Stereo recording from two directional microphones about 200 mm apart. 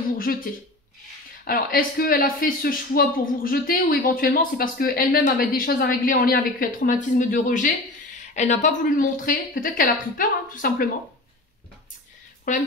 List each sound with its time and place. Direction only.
0.2 s speech: 45° left (ahead or behind)
12.5 s speech: 40° left (ahead or behind)